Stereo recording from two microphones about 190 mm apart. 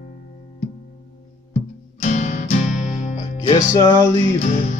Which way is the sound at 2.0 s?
40° left (ahead or behind).